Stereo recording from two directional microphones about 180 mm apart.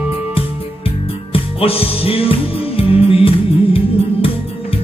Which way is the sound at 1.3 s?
30° left (ahead or behind).